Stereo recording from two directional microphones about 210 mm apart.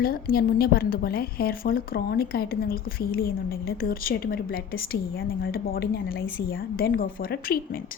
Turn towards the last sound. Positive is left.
turn(degrees=45)  # may be behind; listen again after turning